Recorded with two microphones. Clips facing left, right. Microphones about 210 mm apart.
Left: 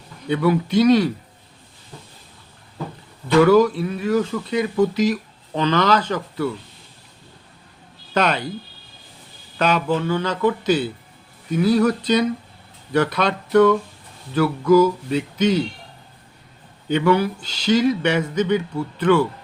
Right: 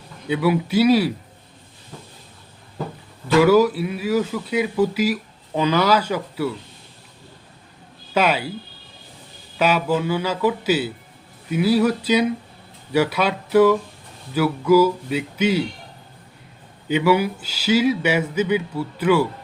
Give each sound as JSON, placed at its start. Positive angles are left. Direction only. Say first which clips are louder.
{"t": 0.3, "sound": "speech", "louder": "left 1 dB", "side_deg": -5}
{"t": 3.4, "sound": "speech", "louder": "left 1 dB", "side_deg": -5}
{"t": 8.1, "sound": "speech", "louder": "right 1 dB", "side_deg": -5}
{"t": 9.6, "sound": "speech", "louder": "even", "side_deg": -5}
{"t": 16.9, "sound": "speech", "louder": "even", "side_deg": -5}